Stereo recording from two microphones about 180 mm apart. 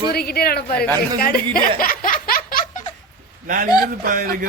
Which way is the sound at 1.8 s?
50° left (ahead or behind).